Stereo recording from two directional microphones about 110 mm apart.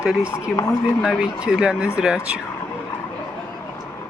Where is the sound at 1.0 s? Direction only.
5° right (ahead or behind).